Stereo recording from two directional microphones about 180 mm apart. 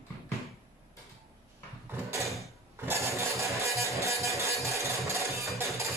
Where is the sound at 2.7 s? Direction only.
15° right (ahead or behind).